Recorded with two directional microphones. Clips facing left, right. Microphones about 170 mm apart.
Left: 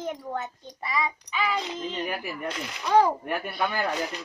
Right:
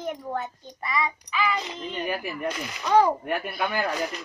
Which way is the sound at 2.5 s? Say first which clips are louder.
Right 2 dB; 5° right (ahead or behind).